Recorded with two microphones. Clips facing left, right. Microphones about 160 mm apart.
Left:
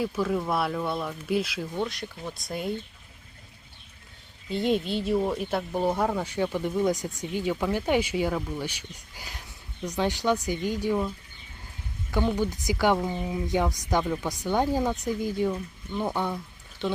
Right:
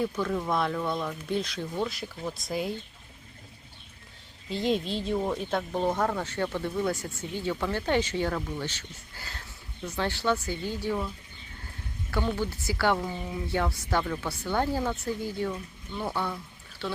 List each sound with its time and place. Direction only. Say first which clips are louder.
0.0 s speech: left 2 dB; 5° left (ahead or behind)
4.4 s speech: left 2 dB; centre (ahead or behind)
12.1 s speech: left 3 dB; 15° left (ahead or behind)